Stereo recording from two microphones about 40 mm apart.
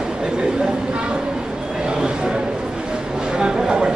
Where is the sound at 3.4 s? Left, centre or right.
Centre.